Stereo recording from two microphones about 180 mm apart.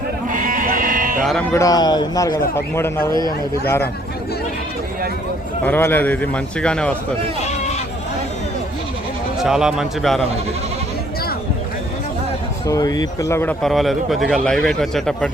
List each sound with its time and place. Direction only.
0.3 s sheep: 50° right (ahead or behind)
1.2 s speech: centre (ahead or behind)
1.5 s a man's voice: 20° left (ahead or behind)
5.6 s a man's voice: 10° left (ahead or behind)
9.4 s speech: 5° right (ahead or behind)
12.6 s speech: 20° left (ahead or behind); by 15.3 s 5° left (ahead or behind)